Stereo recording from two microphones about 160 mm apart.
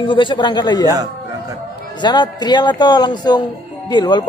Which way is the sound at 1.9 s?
30° left (ahead or behind).